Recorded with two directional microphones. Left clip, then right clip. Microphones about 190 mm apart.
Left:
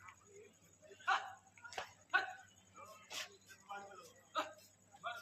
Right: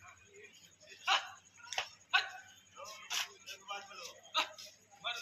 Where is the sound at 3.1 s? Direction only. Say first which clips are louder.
Right 9 dB; 25° right (ahead or behind).